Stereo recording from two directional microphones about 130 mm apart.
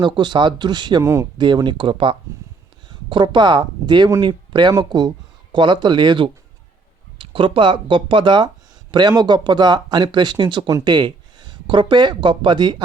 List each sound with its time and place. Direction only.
0.0 s speech: 35° right (ahead or behind)
1.0 s speech: 20° right (ahead or behind)
1.4 s speech: 35° right (ahead or behind)